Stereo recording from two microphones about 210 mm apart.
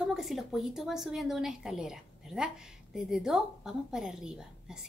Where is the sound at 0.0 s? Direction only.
Centre (ahead or behind).